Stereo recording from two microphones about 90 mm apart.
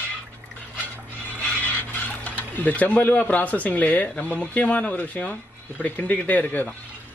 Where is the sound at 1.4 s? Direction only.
20° left (ahead or behind).